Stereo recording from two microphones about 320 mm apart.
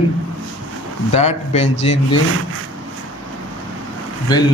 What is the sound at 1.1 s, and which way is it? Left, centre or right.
Speech, centre.